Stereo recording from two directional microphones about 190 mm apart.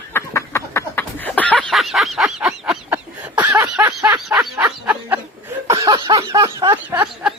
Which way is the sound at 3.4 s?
20° right (ahead or behind).